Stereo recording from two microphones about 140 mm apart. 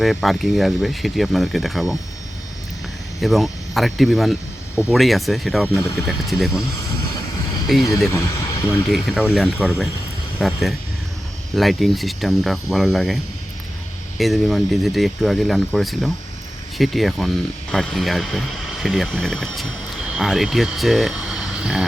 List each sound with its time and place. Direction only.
0.0 s speech: centre (ahead or behind)
3.2 s speech: centre (ahead or behind)
7.7 s speech: centre (ahead or behind)
8.1 s speech: 20° left (ahead or behind)
8.9 s speech: centre (ahead or behind)
14.2 s speech: centre (ahead or behind)